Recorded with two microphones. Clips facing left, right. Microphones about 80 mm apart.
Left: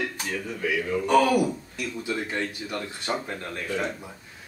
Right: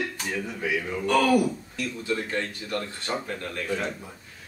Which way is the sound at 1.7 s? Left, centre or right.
Centre.